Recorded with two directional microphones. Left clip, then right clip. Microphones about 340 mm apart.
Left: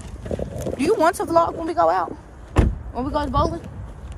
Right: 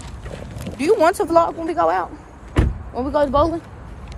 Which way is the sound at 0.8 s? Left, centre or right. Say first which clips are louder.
Right 3 dB; centre.